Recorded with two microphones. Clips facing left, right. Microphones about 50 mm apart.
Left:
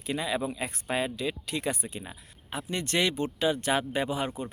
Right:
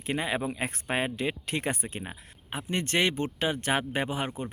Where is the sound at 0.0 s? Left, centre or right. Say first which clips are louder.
Right 1 dB; right.